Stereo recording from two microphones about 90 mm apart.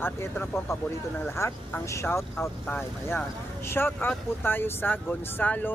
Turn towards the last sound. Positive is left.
turn(degrees=20)  # may be behind; listen again after turning